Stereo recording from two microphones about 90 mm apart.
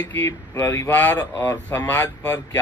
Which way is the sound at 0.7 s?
25° left (ahead or behind).